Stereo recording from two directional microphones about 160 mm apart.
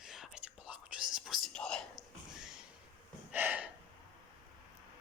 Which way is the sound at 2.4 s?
5° right (ahead or behind).